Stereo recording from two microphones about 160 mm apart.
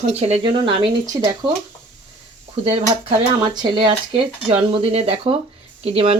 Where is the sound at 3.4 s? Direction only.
25° right (ahead or behind).